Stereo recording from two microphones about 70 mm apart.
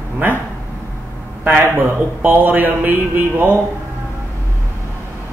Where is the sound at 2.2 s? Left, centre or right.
Right.